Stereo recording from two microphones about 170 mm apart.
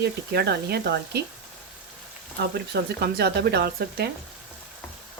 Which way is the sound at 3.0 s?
70° right (ahead or behind).